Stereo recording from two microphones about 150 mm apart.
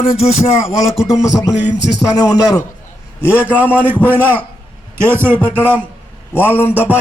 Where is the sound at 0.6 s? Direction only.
Centre (ahead or behind).